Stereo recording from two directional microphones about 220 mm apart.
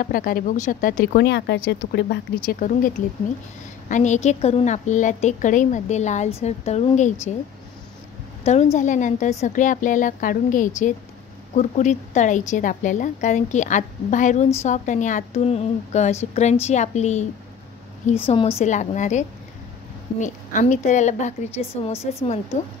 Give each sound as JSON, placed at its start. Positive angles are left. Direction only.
{"t": 0.0, "sound": "a woman's voice", "side_deg": 40}
{"t": 3.9, "sound": "a woman's voice", "side_deg": 35}
{"t": 8.7, "sound": "a woman's voice", "side_deg": 35}